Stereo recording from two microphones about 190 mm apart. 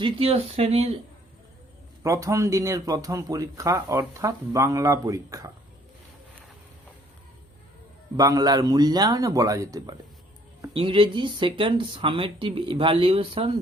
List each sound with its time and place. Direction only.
0.0 s speech: 30° right (ahead or behind)
2.0 s speech: 15° right (ahead or behind)
8.1 s speech: 20° right (ahead or behind)
10.8 s speech: 25° right (ahead or behind)